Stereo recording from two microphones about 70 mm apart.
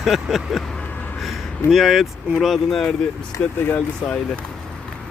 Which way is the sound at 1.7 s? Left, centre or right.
Centre.